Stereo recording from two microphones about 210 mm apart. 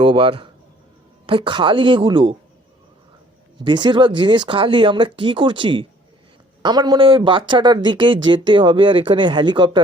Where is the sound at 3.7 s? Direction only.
20° right (ahead or behind).